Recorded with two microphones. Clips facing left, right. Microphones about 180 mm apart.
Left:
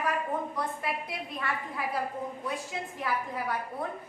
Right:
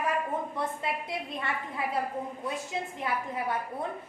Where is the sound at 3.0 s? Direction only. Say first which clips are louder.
Left 2 dB; 25° right (ahead or behind).